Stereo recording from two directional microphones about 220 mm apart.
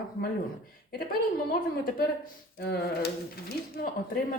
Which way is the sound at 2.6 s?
45° left (ahead or behind).